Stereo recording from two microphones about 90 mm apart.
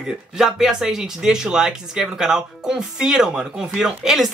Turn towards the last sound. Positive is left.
turn(degrees=-5)  # may be behind; listen again after turning